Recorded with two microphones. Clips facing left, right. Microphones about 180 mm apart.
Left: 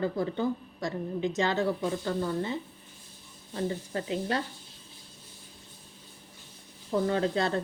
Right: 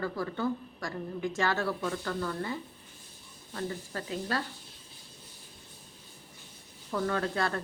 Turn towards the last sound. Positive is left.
turn(degrees=25)  # may be behind; listen again after turning